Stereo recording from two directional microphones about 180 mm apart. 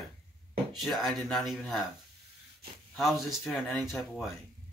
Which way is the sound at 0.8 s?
Centre (ahead or behind).